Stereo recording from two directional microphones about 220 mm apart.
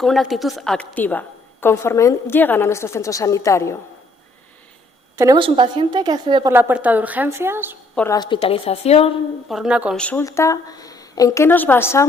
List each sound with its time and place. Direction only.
0.0 s a woman's voice: centre (ahead or behind)
5.1 s a woman's voice: 15° right (ahead or behind)
6.5 s a woman's voice: 10° right (ahead or behind)
7.9 s a woman's voice: 15° left (ahead or behind)
9.5 s a woman's voice: 5° right (ahead or behind)